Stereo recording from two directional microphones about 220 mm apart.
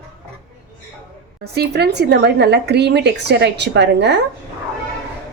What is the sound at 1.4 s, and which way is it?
Speech, 50° right (ahead or behind).